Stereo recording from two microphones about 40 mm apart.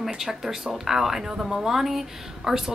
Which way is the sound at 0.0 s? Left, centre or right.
Centre.